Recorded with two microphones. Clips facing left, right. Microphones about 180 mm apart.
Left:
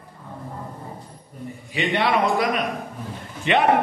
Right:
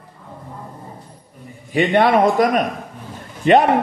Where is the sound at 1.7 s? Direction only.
50° right (ahead or behind).